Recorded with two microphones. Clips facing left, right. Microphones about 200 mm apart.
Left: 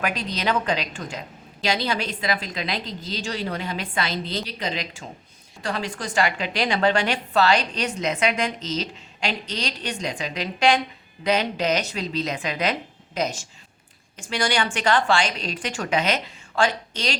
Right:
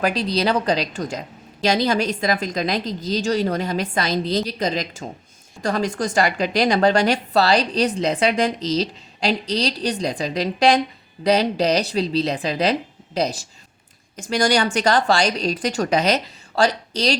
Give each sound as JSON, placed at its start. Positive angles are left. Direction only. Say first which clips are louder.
{"t": 0.0, "sound": "a woman's voice", "louder": "right 6 dB", "side_deg": -35}